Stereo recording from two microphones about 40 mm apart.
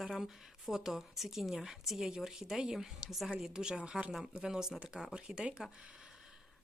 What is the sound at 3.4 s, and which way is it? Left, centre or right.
Speech, centre.